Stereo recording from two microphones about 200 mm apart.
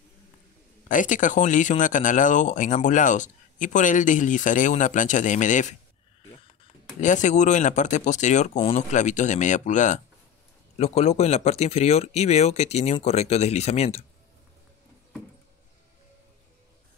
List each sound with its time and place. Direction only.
0.8 s speech: 40° left (ahead or behind)
7.0 s speech: 40° left (ahead or behind)